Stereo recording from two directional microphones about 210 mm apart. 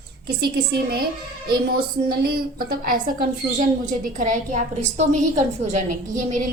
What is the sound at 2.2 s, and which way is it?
Speech, 45° right (ahead or behind).